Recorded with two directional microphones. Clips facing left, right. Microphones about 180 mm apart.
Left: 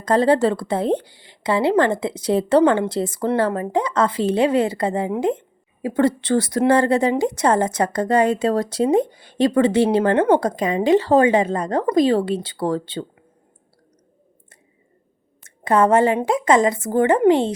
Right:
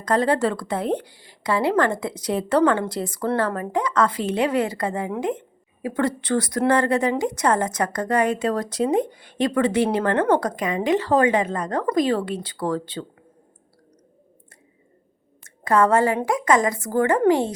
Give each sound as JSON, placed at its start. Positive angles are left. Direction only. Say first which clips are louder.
{"t": 0.0, "sound": "a woman's voice", "louder": "left 4 dB", "side_deg": 30}
{"t": 15.4, "sound": "a woman's voice", "louder": "left 2 dB", "side_deg": 25}